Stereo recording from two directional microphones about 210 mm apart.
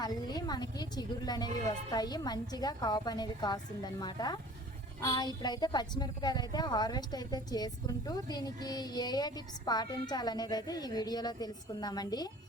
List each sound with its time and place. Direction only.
0.0 s a woman's voice: 20° left (ahead or behind)